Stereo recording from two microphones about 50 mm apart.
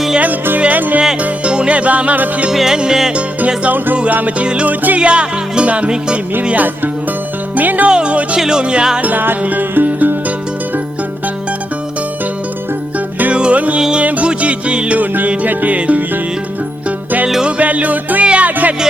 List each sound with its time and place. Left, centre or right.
0.6 s music: right
1.2 s music: right
2.5 s music: centre
3.2 s music: right
3.9 s speech: right
4.6 s music: right
4.9 s speech: right
7.5 s speech: right
7.9 s speech: centre
8.4 s music: centre
9.0 s music: right
13.3 s music: right
14.9 s music: right
17.6 s music: right